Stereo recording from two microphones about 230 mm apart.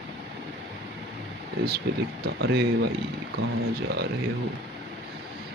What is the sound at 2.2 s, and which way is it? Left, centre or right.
Speech, right.